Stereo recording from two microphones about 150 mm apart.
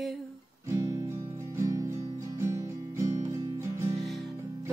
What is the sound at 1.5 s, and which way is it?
Music, 20° right (ahead or behind).